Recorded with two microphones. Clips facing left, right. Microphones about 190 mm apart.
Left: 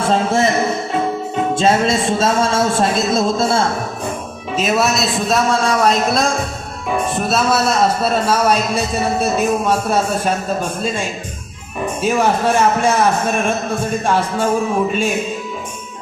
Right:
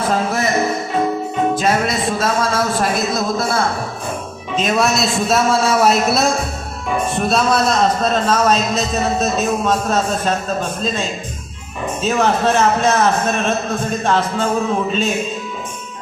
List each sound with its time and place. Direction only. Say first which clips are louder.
0.1 s speech: left 5 dB; 25° left (ahead or behind)
1.5 s speech: left 3 dB; 25° left (ahead or behind)
4.5 s a man's voice: even; 5° left (ahead or behind)